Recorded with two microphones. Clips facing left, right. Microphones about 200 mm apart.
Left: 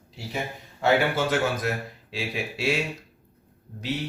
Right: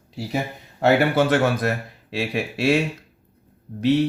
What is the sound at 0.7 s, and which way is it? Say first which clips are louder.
Speech: right 5 dB; 65° right (ahead or behind).